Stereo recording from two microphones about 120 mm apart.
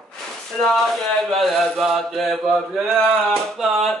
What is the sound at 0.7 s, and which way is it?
Mantra, centre (ahead or behind).